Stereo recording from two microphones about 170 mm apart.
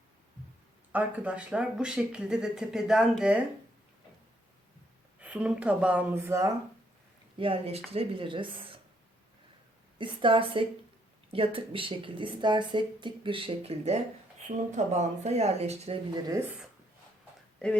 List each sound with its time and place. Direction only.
0.9 s speech: 5° right (ahead or behind)
5.2 s a woman's voice: 5° right (ahead or behind)
7.3 s speech: 30° right (ahead or behind)
10.0 s a woman's voice: 30° right (ahead or behind)